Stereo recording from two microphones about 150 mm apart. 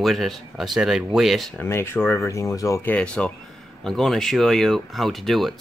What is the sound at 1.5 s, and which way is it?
Speech, 15° left (ahead or behind).